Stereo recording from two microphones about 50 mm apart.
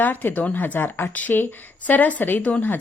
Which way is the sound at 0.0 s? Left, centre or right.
Left.